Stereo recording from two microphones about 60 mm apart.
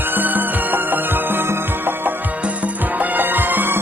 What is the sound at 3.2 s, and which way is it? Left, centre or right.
Music, right.